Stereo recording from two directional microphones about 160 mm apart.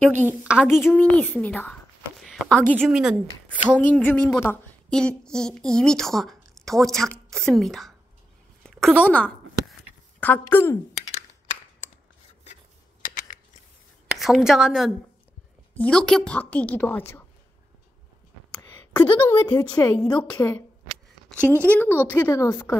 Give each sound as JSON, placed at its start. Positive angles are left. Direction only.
{"t": 0.3, "sound": "a woman's voice", "side_deg": -10}
{"t": 0.8, "sound": "a woman's voice", "side_deg": 10}
{"t": 2.9, "sound": "a woman's voice", "side_deg": -5}
{"t": 3.8, "sound": "a sound", "side_deg": 10}
{"t": 4.9, "sound": "a woman's voice", "side_deg": 5}
{"t": 8.6, "sound": "a sound", "side_deg": 5}
{"t": 10.2, "sound": "a woman's voice", "side_deg": 10}
{"t": 13.0, "sound": "a sound", "side_deg": 60}
{"t": 14.1, "sound": "a woman's voice", "side_deg": 0}
{"t": 15.7, "sound": "a woman's voice", "side_deg": 10}
{"t": 18.6, "sound": "a woman's voice", "side_deg": 15}